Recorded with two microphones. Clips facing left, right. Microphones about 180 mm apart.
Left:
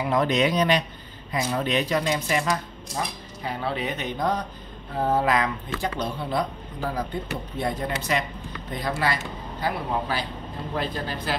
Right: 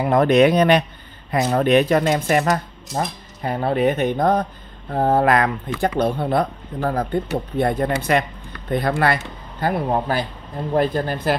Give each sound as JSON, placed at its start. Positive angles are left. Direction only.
{"t": 0.0, "sound": "speech", "side_deg": -55}